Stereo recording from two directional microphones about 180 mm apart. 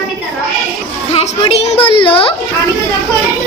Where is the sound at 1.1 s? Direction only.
35° left (ahead or behind).